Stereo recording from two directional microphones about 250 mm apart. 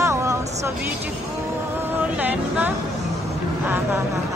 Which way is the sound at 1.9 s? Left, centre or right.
Centre.